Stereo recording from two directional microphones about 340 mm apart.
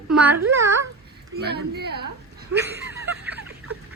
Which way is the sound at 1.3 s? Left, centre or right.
Right.